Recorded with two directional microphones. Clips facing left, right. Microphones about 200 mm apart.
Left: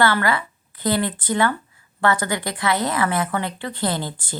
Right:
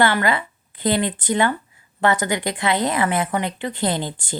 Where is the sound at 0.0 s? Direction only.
20° right (ahead or behind).